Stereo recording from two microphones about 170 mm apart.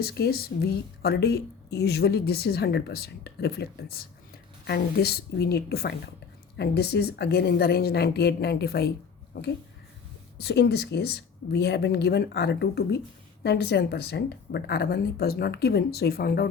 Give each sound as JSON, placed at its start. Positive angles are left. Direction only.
{"t": 0.0, "sound": "speech", "side_deg": 65}
{"t": 9.3, "sound": "speech", "side_deg": 60}
{"t": 10.3, "sound": "speech", "side_deg": 75}